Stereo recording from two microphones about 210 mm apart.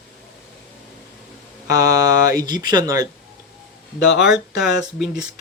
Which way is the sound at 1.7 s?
15° right (ahead or behind).